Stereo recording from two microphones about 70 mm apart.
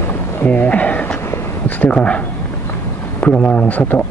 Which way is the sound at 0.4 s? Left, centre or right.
Left.